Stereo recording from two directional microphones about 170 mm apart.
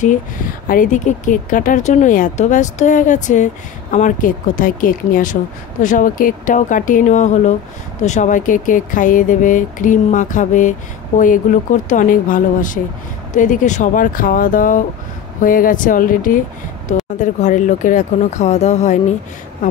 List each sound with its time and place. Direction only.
0.7 s speech: 50° left (ahead or behind)